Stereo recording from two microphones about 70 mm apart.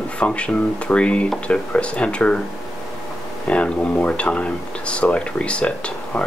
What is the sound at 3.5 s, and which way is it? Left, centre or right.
Speech, centre.